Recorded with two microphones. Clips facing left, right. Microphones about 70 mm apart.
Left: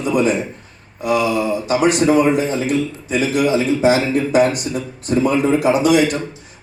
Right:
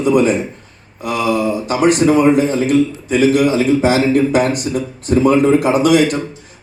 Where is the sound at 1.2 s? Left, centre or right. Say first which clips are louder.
Right 2 dB; right.